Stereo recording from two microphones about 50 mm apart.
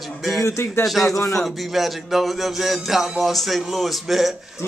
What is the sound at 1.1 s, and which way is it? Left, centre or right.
Speech, left.